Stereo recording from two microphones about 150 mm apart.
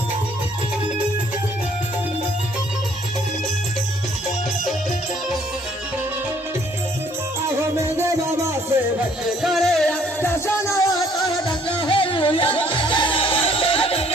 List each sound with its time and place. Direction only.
7.8 s music: 15° right (ahead or behind)
9.4 s music: centre (ahead or behind)
10.2 s music: 15° left (ahead or behind); by 14.0 s 40° left (ahead or behind)